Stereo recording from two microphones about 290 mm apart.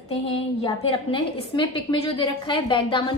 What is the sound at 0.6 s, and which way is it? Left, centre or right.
A woman's voice, centre.